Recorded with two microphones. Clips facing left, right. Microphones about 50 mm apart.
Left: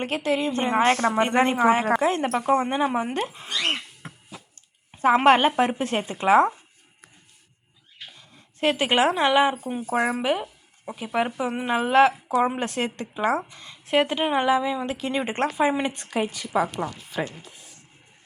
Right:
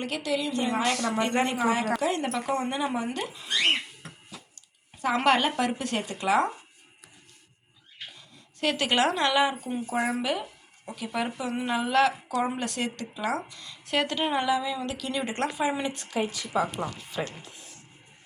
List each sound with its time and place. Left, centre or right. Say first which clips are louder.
0.0 s speech: left 5 dB; left
4.0 s a sound: left 4 dB; left
4.9 s a woman's voice: left 6 dB; left
8.6 s a woman's voice: left 4 dB; centre; by 16.7 s left